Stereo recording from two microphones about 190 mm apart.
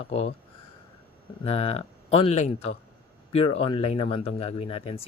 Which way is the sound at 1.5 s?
30° left (ahead or behind).